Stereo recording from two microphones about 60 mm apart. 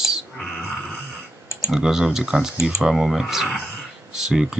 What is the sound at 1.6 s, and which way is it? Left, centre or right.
Speech, centre.